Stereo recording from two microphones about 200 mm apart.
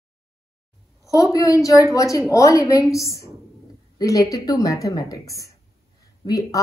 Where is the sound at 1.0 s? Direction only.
15° left (ahead or behind).